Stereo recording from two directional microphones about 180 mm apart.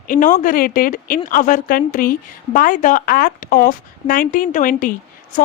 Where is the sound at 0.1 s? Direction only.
45° left (ahead or behind).